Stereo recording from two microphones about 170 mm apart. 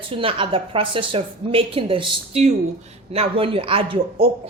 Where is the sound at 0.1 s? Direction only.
30° right (ahead or behind).